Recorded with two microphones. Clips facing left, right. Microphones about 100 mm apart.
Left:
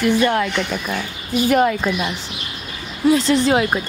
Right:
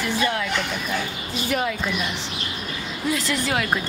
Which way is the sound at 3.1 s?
30° left (ahead or behind).